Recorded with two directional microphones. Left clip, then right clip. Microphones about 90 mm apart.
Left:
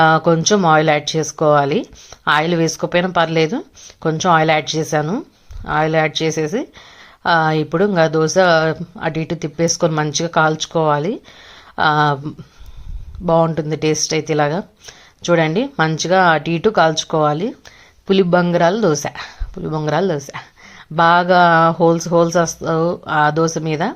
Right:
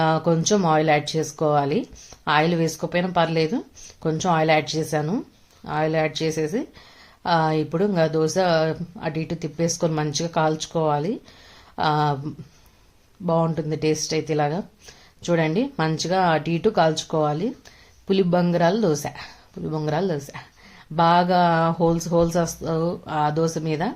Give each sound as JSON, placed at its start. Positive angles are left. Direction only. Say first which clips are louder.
{"t": 0.0, "sound": "speech", "louder": "left 8 dB", "side_deg": 30}